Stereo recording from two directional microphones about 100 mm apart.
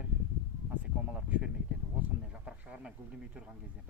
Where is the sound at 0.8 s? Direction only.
10° right (ahead or behind).